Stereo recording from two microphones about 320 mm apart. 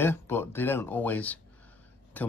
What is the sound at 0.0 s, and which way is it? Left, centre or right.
Speech, centre.